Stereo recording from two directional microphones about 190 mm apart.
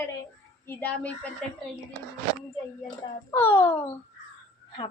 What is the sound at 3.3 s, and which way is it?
Speech, 10° left (ahead or behind).